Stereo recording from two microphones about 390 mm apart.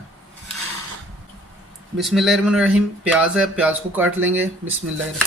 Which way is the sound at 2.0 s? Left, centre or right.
Centre.